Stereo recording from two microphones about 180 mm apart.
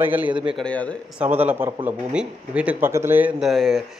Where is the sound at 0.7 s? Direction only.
5° left (ahead or behind).